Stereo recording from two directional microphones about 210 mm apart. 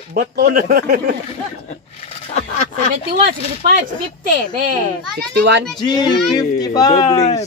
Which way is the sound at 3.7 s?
40° right (ahead or behind).